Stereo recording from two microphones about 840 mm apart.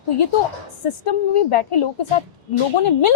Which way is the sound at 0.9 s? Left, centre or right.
Left.